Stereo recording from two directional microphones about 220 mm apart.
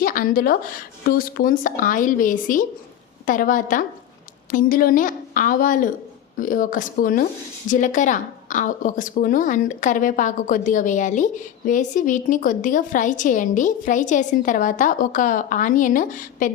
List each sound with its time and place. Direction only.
0.0 s a woman's voice: 40° left (ahead or behind)